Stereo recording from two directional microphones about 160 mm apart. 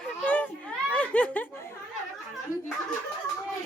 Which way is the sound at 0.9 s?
10° left (ahead or behind).